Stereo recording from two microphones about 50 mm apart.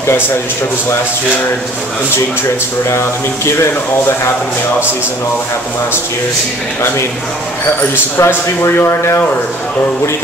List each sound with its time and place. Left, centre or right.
2.9 s speech: left
7.9 s a man's voice: left